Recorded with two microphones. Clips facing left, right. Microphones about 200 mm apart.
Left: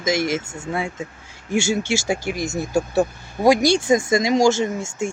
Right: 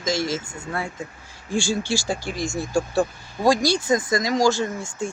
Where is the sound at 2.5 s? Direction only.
20° left (ahead or behind).